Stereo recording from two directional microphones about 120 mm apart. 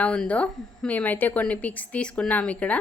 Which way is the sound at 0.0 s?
10° left (ahead or behind).